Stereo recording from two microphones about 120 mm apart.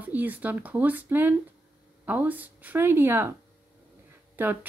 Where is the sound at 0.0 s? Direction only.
15° right (ahead or behind).